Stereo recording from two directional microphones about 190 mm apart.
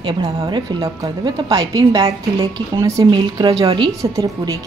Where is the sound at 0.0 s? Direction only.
25° right (ahead or behind).